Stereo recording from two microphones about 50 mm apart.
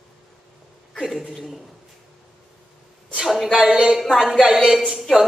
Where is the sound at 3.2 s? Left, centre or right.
Centre.